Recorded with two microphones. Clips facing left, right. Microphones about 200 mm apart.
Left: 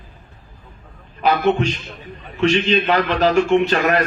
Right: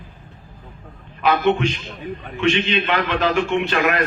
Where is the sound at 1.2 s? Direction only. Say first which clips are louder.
Left 1 dB; 40° left (ahead or behind).